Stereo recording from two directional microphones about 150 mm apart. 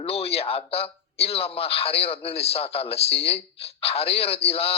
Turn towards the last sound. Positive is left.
turn(degrees=40)  # may be behind; listen again after turning